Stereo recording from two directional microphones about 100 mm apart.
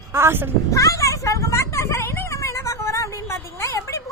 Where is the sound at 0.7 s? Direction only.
35° left (ahead or behind).